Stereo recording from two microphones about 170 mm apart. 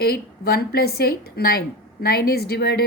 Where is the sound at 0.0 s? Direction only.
65° left (ahead or behind).